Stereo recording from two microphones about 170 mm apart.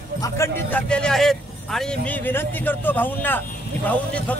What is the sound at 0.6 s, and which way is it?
A man's voice, 5° left (ahead or behind).